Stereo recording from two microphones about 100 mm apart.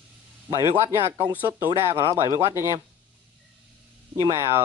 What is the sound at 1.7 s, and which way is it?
Speech, 50° right (ahead or behind).